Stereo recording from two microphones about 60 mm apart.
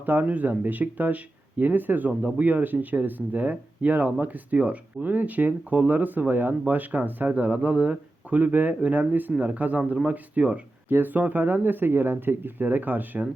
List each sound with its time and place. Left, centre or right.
0.0 s speech: right
10.8 s speech: right